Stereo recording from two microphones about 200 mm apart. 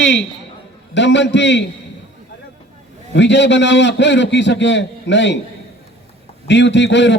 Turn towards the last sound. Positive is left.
turn(degrees=60)  # may be behind; listen again after turning